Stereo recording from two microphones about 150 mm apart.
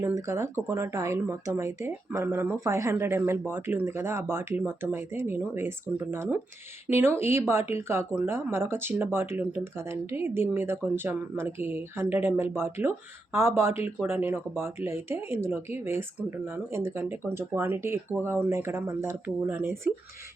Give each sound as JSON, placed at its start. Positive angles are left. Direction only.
{"t": 0.0, "sound": "speech", "side_deg": -20}